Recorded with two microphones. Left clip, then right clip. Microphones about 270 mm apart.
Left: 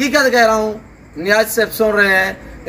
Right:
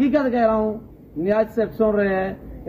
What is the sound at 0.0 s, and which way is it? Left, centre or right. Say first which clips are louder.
A man's voice: left 7 dB; centre.